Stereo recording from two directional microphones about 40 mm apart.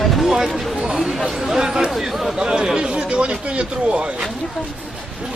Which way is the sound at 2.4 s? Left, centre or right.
Centre.